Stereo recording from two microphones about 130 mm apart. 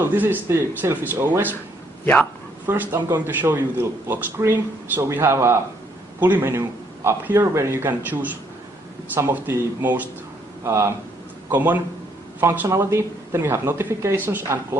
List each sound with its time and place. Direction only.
0.0 s a man's voice: 15° right (ahead or behind)
2.9 s a man's voice: 20° right (ahead or behind)